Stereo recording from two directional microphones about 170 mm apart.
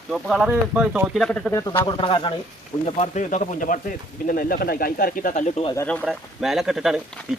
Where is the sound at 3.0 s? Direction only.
45° left (ahead or behind).